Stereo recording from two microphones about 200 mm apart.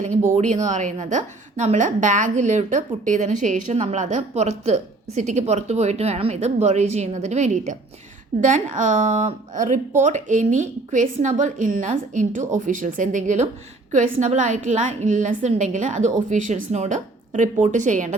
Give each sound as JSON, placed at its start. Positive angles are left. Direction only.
{"t": 0.3, "sound": "a woman's voice", "side_deg": -35}